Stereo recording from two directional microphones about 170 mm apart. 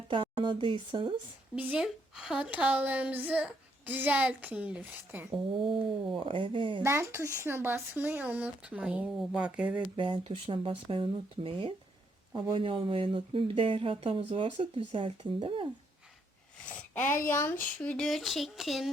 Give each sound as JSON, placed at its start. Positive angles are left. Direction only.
{"t": 0.1, "sound": "speech", "side_deg": -30}
{"t": 1.5, "sound": "a woman's voice", "side_deg": -5}
{"t": 5.3, "sound": "speech", "side_deg": -30}
{"t": 6.8, "sound": "a woman's voice", "side_deg": -15}
{"t": 10.0, "sound": "speech", "side_deg": -30}
{"t": 16.6, "sound": "speech", "side_deg": 10}